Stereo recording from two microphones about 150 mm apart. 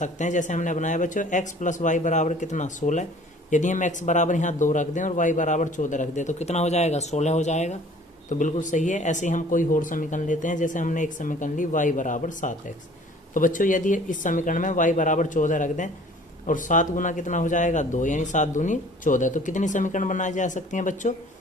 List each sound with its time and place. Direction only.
0.0 s speech: 55° left (ahead or behind)